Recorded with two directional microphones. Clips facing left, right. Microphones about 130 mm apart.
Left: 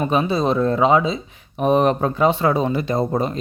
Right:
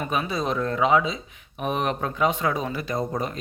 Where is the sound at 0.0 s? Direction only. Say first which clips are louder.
Left 7 dB; 30° left (ahead or behind).